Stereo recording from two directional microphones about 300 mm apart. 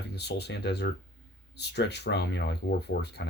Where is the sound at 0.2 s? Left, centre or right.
Left.